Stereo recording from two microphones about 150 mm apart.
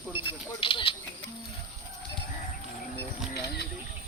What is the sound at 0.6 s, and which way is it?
Speech, 35° left (ahead or behind).